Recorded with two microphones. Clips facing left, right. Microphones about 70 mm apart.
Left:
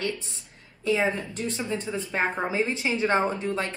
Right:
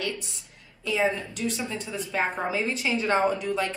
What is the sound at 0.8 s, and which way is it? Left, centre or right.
Speech, left.